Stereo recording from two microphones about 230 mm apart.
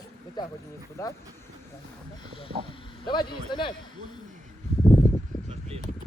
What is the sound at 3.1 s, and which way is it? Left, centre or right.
Speech, centre.